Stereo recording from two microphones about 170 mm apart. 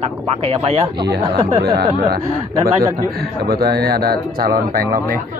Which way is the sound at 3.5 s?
65° right (ahead or behind).